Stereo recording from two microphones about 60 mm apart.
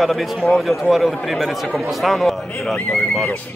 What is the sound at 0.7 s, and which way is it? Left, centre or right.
A man's voice, centre.